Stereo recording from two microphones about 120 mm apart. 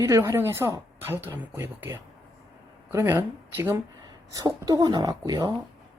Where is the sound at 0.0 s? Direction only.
30° right (ahead or behind).